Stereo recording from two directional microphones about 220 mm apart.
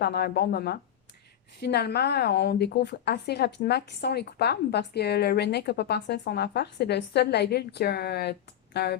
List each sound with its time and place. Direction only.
0.0 s speech: 45° left (ahead or behind)